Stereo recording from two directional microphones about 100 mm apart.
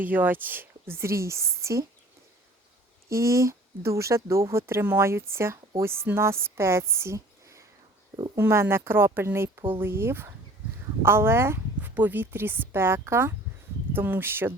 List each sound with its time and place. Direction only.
0.0 s speech: 20° right (ahead or behind)
3.1 s speech: 30° right (ahead or behind)